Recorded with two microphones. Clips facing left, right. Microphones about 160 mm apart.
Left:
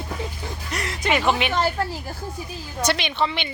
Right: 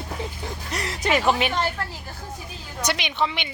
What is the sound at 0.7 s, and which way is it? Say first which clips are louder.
Speech: even; 35° right (ahead or behind).